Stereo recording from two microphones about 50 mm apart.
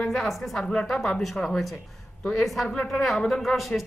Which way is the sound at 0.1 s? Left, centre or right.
Centre.